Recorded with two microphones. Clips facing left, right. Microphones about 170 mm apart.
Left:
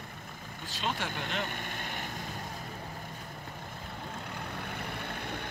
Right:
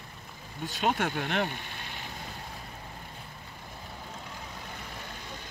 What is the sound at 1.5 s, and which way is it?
Vehicle, 50° left (ahead or behind).